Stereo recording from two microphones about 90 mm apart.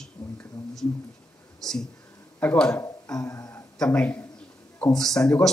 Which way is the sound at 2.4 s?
15° left (ahead or behind).